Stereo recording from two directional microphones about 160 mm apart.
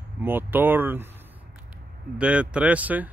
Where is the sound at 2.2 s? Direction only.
5° right (ahead or behind).